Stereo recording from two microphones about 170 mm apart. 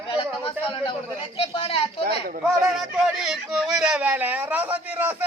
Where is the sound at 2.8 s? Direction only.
Centre (ahead or behind).